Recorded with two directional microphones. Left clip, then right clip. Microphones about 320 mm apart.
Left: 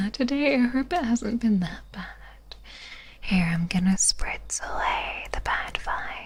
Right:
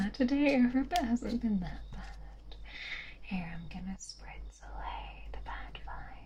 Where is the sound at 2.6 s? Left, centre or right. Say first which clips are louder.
Right 2 dB; left.